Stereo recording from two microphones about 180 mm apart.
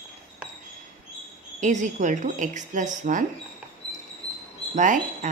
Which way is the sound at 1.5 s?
45° right (ahead or behind).